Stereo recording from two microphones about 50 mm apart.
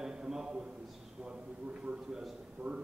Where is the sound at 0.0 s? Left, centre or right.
Centre.